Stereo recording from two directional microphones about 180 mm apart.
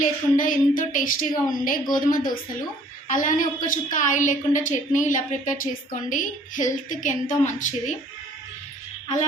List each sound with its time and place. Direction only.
0.0 s a woman's voice: 45° left (ahead or behind)